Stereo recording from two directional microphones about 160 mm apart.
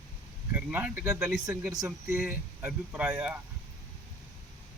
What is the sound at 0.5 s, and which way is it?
Speech, 10° right (ahead or behind).